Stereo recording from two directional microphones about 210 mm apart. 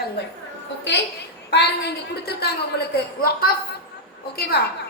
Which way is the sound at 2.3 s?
50° left (ahead or behind).